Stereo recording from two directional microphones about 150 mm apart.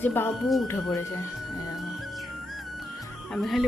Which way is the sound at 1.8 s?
Centre (ahead or behind).